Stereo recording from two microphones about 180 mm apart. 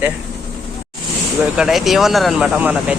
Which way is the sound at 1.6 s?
Centre (ahead or behind).